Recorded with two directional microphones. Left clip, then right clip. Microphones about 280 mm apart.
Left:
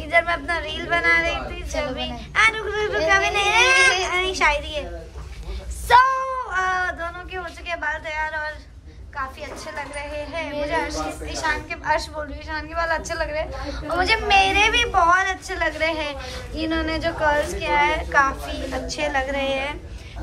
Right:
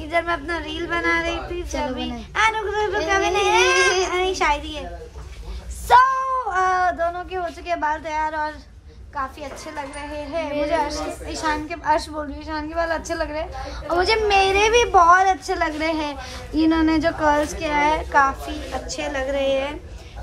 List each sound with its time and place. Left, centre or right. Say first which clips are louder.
0.0 s a woman's voice: left 2 dB; centre
5.9 s a woman's voice: right 1 dB; centre